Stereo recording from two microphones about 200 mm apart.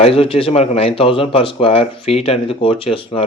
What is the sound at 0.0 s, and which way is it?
Speech, 30° left (ahead or behind).